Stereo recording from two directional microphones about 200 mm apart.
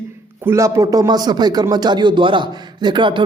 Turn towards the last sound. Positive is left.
turn(degrees=-25)  # may be behind; listen again after turning